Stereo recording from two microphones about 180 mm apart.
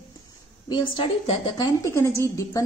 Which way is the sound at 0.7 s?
30° left (ahead or behind).